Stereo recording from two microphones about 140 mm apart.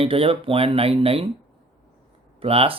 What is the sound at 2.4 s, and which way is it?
Speech, 45° right (ahead or behind).